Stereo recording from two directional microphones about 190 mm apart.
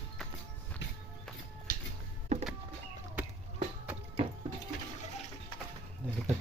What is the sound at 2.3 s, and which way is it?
Power windows, 35° right (ahead or behind).